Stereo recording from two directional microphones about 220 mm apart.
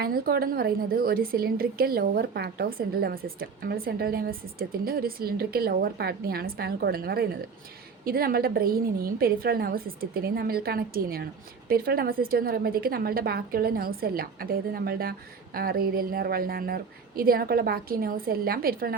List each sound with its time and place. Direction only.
0.0 s a woman's voice: 45° right (ahead or behind)